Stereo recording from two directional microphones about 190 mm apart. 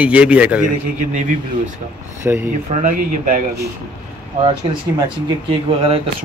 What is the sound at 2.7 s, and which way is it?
Speech, 40° right (ahead or behind).